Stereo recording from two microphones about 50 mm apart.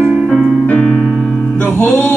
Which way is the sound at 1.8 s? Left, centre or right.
Left.